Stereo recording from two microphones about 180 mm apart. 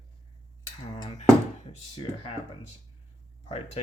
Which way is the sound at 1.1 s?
40° left (ahead or behind).